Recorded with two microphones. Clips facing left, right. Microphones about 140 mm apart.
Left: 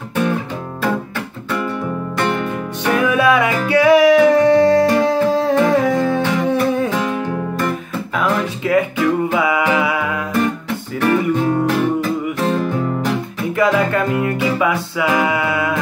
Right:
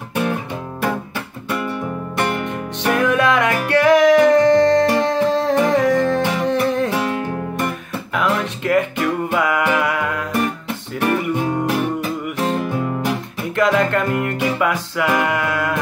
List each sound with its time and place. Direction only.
0.1 s music: 15° right (ahead or behind)
2.9 s music: centre (ahead or behind)
8.2 s music: centre (ahead or behind)
11.0 s music: 15° right (ahead or behind)
13.6 s music: 5° left (ahead or behind)